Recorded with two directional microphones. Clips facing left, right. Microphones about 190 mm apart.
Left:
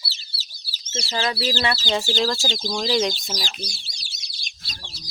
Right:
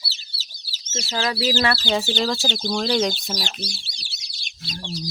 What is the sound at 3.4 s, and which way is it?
Speech, 65° right (ahead or behind).